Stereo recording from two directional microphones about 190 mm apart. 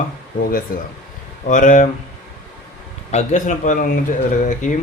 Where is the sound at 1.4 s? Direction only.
45° left (ahead or behind).